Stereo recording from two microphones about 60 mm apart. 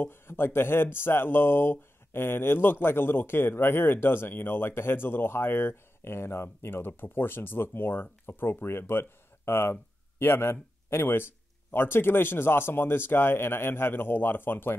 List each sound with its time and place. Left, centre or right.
0.0 s speech: left